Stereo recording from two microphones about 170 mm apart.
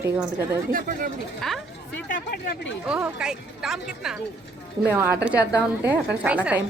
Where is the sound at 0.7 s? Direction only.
55° right (ahead or behind).